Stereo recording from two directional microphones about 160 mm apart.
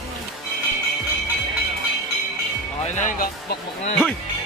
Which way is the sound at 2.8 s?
50° left (ahead or behind).